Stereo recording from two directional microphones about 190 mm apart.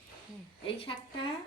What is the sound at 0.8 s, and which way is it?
Speech, 30° left (ahead or behind).